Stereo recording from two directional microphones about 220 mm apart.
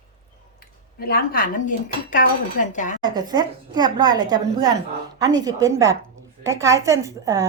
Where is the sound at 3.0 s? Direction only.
20° right (ahead or behind).